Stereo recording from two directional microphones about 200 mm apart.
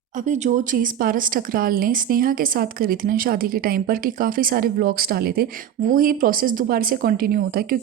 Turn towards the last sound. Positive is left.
turn(degrees=-45)  # may be behind; listen again after turning